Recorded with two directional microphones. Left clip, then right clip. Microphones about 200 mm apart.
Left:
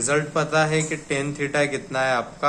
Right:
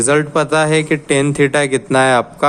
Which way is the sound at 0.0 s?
55° right (ahead or behind).